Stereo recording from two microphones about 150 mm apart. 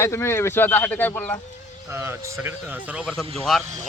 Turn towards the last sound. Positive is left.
turn(degrees=0)  # may be behind; listen again after turning